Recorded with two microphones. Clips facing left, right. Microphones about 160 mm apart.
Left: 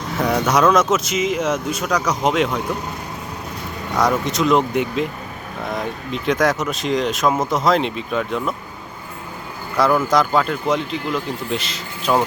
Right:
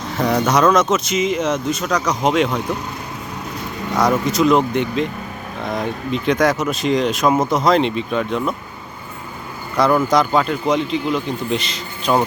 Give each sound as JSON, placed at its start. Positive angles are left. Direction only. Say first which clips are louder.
{"t": 0.4, "sound": "speech", "louder": "even", "side_deg": 5}
{"t": 3.9, "sound": "speech", "louder": "right 2 dB", "side_deg": 0}
{"t": 9.7, "sound": "speech", "louder": "right 1 dB", "side_deg": 5}